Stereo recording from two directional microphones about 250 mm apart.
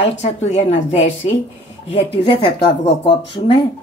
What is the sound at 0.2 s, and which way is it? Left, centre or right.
Speech, left.